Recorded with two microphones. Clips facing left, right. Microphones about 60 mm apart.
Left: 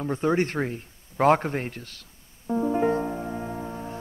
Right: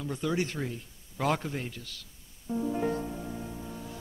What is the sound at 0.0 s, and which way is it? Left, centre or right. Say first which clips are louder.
A man's voice: left 7 dB; left.